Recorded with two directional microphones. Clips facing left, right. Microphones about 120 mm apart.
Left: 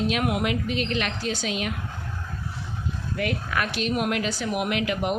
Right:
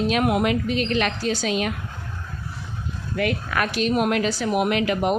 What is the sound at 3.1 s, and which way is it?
Speech, 75° right (ahead or behind).